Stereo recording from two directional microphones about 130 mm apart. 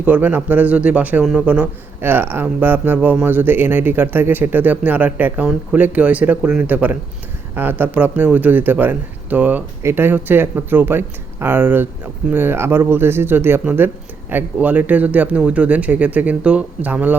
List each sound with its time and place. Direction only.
0.0 s a man's voice: 15° right (ahead or behind)